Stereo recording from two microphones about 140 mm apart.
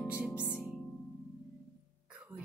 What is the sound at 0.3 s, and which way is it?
Music, 15° left (ahead or behind).